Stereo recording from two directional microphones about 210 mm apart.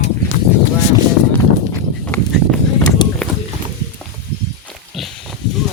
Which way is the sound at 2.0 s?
5° left (ahead or behind).